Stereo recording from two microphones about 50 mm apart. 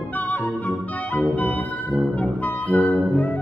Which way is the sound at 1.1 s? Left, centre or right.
Left.